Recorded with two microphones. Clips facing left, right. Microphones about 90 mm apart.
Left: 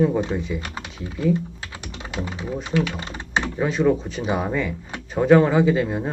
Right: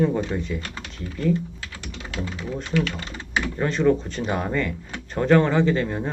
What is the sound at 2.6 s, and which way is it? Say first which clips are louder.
Speech: left 1 dB; 15° left (ahead or behind).